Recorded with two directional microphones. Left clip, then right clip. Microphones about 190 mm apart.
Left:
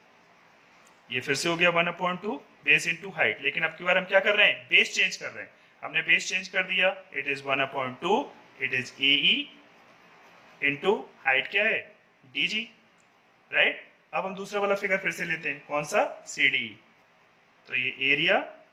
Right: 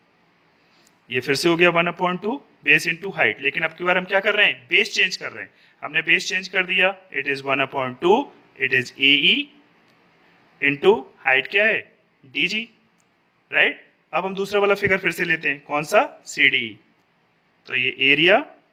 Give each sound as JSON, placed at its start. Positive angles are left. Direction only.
{"t": 1.0, "sound": "speech", "side_deg": -40}
{"t": 10.6, "sound": "speech", "side_deg": -45}